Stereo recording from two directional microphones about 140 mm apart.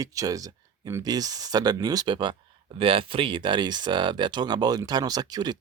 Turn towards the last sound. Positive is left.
turn(degrees=-30)  # may be behind; listen again after turning